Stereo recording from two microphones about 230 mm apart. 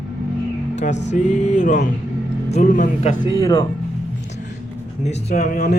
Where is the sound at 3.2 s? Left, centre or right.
Centre.